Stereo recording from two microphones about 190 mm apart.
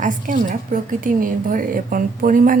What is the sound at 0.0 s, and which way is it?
Speech, 45° right (ahead or behind).